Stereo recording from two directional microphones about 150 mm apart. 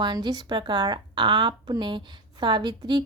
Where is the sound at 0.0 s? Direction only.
30° right (ahead or behind).